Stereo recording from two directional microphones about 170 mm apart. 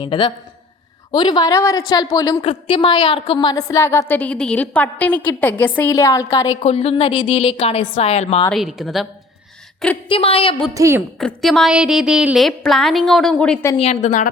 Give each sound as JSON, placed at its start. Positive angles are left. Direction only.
{"t": 0.0, "sound": "a woman's voice", "side_deg": 30}
{"t": 2.4, "sound": "a woman's voice", "side_deg": 30}
{"t": 6.7, "sound": "a woman's voice", "side_deg": 35}
{"t": 8.4, "sound": "a woman's voice", "side_deg": 0}
{"t": 10.1, "sound": "a woman's voice", "side_deg": 35}
{"t": 10.8, "sound": "a woman's voice", "side_deg": -15}
{"t": 11.2, "sound": "a woman's voice", "side_deg": 5}
{"t": 13.7, "sound": "a woman's voice", "side_deg": 35}